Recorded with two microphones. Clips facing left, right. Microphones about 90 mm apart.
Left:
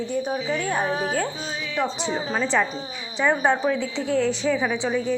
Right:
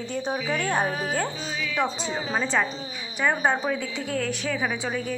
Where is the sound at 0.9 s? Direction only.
30° left (ahead or behind).